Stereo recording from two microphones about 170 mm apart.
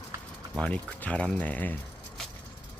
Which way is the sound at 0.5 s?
5° left (ahead or behind).